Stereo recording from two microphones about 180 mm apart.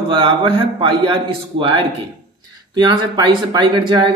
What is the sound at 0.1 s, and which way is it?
Speech, 25° right (ahead or behind).